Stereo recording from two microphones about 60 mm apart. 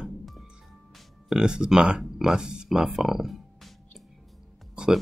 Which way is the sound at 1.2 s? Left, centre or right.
Centre.